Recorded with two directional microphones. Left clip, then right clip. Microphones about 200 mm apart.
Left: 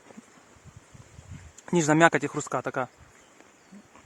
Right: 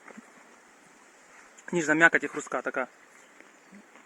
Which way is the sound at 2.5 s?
20° left (ahead or behind).